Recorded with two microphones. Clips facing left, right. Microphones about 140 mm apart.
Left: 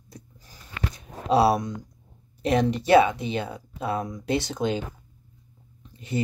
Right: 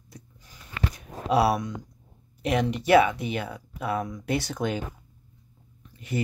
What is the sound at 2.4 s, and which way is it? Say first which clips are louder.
Speech: left 2 dB; 35° left (ahead or behind).